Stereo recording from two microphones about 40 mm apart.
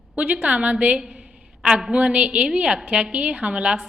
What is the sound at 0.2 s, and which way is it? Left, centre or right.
Speech, right.